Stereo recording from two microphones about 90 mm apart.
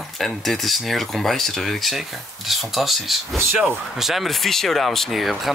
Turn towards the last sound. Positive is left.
turn(degrees=0)  # may be behind; listen again after turning